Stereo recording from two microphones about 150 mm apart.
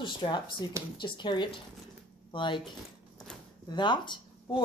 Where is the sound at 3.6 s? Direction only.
30° left (ahead or behind).